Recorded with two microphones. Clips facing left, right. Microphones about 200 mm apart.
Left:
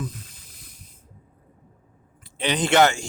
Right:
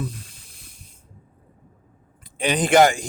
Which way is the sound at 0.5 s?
30° right (ahead or behind).